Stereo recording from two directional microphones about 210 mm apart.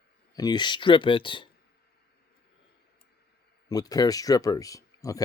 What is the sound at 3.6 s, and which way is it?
Speech, 15° left (ahead or behind).